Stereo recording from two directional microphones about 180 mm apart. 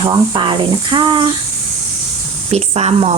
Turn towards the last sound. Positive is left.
turn(degrees=-35)  # may be behind; listen again after turning